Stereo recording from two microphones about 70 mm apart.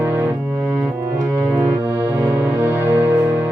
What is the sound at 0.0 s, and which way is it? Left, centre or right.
Keyboard, right.